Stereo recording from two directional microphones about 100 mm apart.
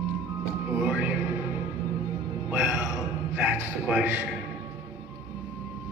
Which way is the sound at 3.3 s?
15° right (ahead or behind).